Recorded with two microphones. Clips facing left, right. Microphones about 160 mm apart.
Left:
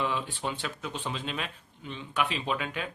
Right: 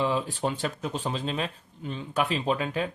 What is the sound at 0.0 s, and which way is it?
Speech, 35° right (ahead or behind).